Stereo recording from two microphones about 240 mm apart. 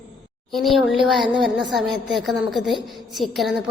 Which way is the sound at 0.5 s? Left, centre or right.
Centre.